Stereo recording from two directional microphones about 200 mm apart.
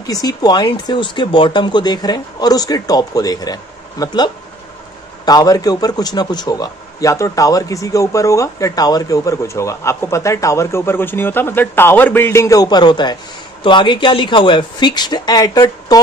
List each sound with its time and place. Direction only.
0.0 s a man's voice: 20° left (ahead or behind)